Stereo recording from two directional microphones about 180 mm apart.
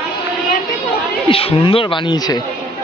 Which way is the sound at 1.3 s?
30° left (ahead or behind).